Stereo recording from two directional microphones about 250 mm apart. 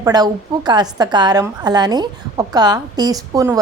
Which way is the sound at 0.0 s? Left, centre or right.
Centre.